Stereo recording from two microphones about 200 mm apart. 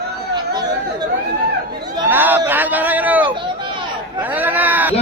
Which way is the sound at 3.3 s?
25° right (ahead or behind).